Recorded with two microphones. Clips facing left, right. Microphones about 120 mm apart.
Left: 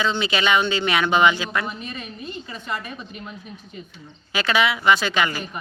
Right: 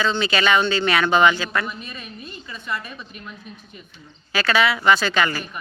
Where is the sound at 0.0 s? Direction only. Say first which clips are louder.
Right 1 dB; 15° left (ahead or behind).